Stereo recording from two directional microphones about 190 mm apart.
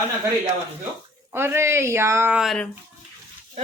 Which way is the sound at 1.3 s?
10° right (ahead or behind).